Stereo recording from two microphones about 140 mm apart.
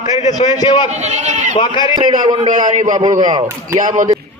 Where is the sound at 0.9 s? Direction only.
55° right (ahead or behind).